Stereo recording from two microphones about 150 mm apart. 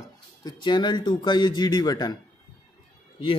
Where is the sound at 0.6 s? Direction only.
30° left (ahead or behind).